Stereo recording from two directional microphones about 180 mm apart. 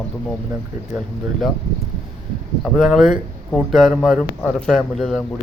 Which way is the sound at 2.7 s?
Centre (ahead or behind).